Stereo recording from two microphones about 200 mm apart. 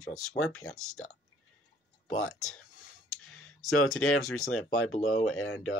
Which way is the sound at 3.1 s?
90° left.